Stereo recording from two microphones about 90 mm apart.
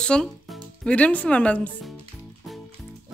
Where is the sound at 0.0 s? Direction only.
10° left (ahead or behind).